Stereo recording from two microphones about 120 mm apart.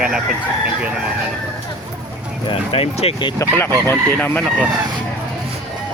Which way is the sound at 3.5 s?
20° left (ahead or behind).